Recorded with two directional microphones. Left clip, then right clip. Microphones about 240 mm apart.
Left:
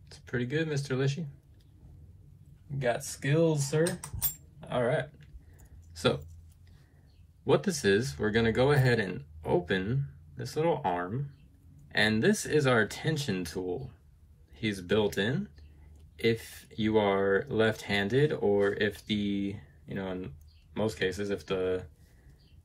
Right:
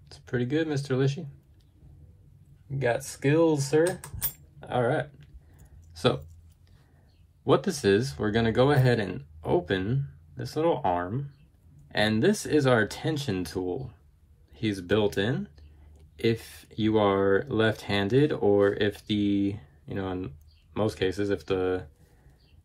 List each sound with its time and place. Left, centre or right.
0.1 s speech: centre
3.0 s speech: right
4.6 s cutlery: centre
5.9 s speech: centre
7.4 s speech: centre